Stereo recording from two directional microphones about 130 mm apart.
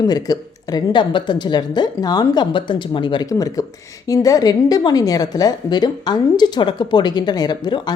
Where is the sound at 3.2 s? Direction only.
25° left (ahead or behind).